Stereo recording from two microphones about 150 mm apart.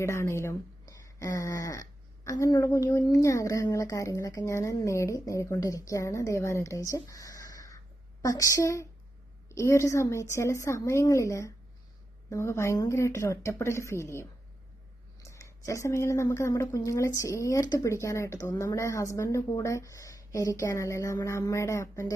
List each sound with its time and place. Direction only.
0.0 s speech: 20° left (ahead or behind)